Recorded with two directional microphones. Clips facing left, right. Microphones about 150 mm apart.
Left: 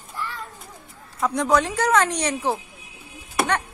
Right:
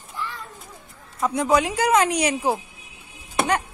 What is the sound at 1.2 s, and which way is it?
Speech, 5° right (ahead or behind).